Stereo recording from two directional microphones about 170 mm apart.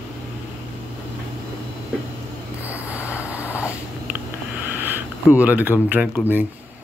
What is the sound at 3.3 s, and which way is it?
Vehicle, 10° right (ahead or behind).